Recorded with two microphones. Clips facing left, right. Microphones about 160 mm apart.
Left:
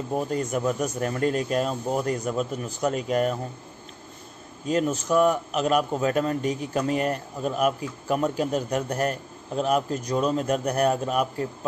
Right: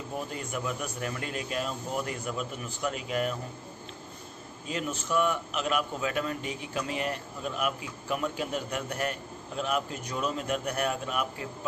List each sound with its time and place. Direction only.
0.1 s a man's voice: 40° left (ahead or behind)
4.6 s a man's voice: 40° left (ahead or behind)